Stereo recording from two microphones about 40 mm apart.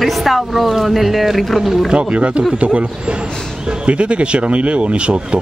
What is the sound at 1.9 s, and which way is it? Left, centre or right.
Speech, right.